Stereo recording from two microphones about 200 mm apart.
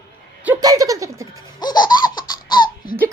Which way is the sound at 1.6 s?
20° left (ahead or behind).